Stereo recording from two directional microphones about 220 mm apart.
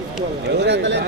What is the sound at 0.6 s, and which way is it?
Speech, 50° right (ahead or behind).